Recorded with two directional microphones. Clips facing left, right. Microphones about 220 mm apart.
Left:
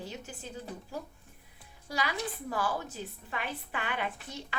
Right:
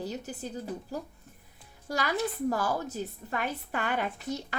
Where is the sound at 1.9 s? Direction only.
45° right (ahead or behind).